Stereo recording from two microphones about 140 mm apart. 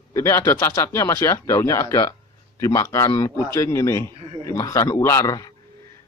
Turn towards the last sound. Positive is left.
turn(degrees=25)  # may be behind; listen again after turning